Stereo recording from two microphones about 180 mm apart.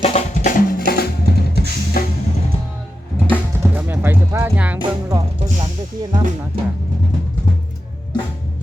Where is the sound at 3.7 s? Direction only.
10° right (ahead or behind).